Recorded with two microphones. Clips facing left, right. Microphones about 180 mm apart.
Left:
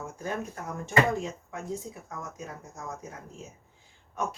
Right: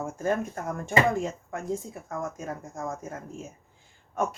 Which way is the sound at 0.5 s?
50° right (ahead or behind).